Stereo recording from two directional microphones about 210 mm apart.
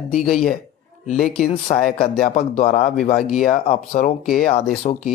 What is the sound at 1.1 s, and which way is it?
Speech, 35° left (ahead or behind).